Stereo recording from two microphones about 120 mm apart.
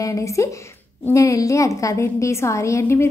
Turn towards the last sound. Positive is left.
turn(degrees=25)  # may be behind; listen again after turning